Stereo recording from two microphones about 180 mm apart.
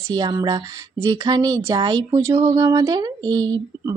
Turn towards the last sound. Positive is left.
turn(degrees=-20)  # may be behind; listen again after turning